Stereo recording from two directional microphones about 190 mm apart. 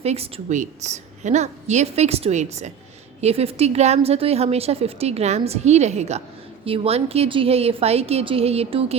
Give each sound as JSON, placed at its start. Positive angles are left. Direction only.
{"t": 0.0, "sound": "a woman's voice", "side_deg": -35}